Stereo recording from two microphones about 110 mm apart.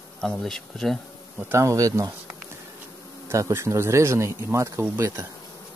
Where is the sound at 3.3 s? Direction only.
25° right (ahead or behind).